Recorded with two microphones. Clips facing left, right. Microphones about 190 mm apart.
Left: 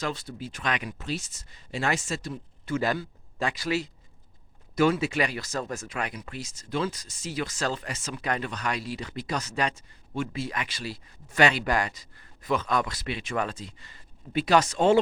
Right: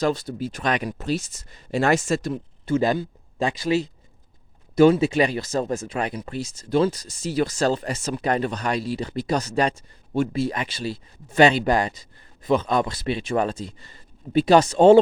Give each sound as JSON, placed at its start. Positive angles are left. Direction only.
{"t": 0.0, "sound": "speech", "side_deg": -40}
{"t": 2.6, "sound": "speech", "side_deg": -25}